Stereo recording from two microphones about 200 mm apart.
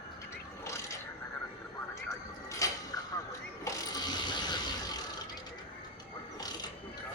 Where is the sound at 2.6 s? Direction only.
15° left (ahead or behind).